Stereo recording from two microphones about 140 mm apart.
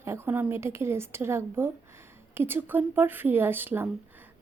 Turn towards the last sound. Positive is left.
turn(degrees=-15)  # may be behind; listen again after turning